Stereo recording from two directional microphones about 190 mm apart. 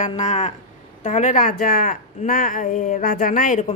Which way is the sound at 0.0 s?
35° left (ahead or behind).